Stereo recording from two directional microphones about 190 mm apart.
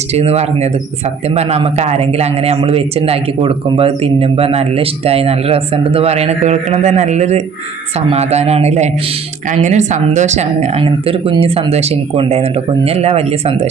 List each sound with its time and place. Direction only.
0.1 s a man's voice: 35° right (ahead or behind)